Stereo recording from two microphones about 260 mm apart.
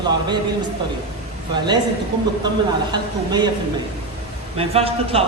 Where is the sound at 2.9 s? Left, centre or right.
Centre.